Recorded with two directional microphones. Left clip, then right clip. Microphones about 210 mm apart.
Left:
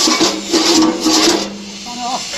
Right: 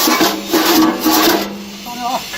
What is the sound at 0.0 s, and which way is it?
Music, 5° right (ahead or behind).